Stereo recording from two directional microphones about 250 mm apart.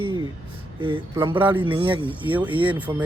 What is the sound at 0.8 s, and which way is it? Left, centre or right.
Speech, centre.